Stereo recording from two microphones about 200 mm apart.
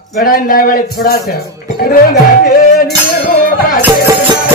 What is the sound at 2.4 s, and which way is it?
Speech, 50° left (ahead or behind).